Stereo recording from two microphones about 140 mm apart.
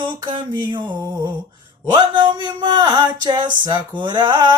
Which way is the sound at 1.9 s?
30° right (ahead or behind).